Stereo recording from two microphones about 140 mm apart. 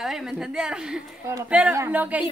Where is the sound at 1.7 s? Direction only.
15° right (ahead or behind).